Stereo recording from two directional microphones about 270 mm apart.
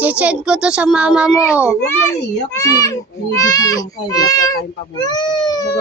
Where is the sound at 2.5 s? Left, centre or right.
Centre.